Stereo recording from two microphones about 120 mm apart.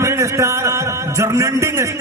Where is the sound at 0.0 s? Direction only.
25° right (ahead or behind).